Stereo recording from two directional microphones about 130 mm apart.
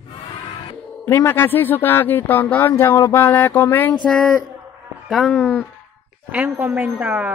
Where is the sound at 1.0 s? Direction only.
15° left (ahead or behind).